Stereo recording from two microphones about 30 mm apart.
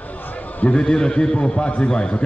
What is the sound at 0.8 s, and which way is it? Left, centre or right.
A man's voice, left.